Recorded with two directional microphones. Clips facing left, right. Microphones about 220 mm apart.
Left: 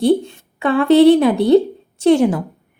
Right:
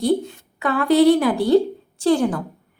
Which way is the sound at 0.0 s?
30° left (ahead or behind).